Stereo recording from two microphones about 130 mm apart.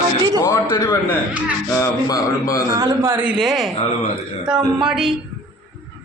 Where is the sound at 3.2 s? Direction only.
5° right (ahead or behind).